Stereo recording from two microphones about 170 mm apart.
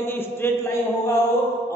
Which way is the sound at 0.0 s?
15° left (ahead or behind).